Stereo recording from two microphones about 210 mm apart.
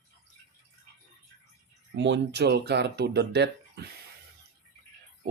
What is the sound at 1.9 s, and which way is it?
Speech, 60° right (ahead or behind).